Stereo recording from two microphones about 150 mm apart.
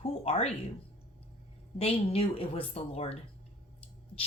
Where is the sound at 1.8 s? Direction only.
40° left (ahead or behind).